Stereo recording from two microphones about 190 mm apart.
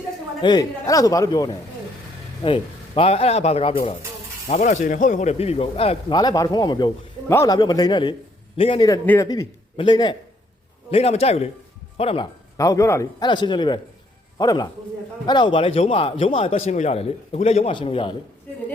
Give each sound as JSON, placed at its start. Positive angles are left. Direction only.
{"t": 0.4, "sound": "a man's voice", "side_deg": 20}
{"t": 2.4, "sound": "a man's voice", "side_deg": 30}
{"t": 12.5, "sound": "a man's voice", "side_deg": 15}